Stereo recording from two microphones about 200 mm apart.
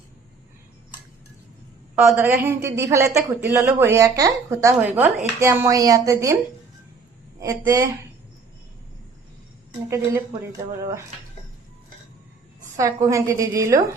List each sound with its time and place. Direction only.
2.0 s speech: 10° right (ahead or behind)
7.3 s speech: 15° right (ahead or behind)
9.9 s speech: 15° right (ahead or behind)
12.7 s speech: 15° right (ahead or behind)